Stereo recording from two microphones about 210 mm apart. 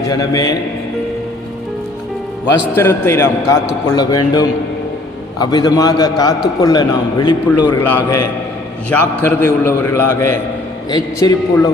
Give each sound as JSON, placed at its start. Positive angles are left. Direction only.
{"t": 0.1, "sound": "a man's voice", "side_deg": 15}
{"t": 2.7, "sound": "a man's voice", "side_deg": 10}
{"t": 7.8, "sound": "a man's voice", "side_deg": 10}
{"t": 9.2, "sound": "a man's voice", "side_deg": 10}